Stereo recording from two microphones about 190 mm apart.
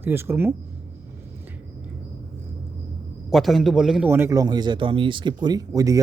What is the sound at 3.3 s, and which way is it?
A man's voice, centre (ahead or behind).